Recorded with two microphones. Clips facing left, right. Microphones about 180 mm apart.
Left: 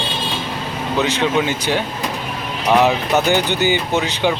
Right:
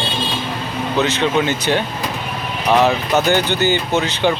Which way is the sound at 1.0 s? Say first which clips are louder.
Even; 10° left (ahead or behind).